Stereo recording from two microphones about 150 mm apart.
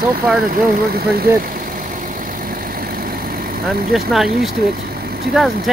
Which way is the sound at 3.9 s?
Centre (ahead or behind).